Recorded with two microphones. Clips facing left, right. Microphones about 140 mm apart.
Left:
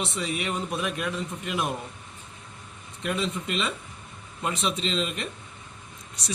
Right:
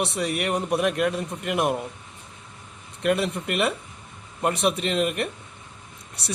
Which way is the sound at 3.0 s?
65° right (ahead or behind).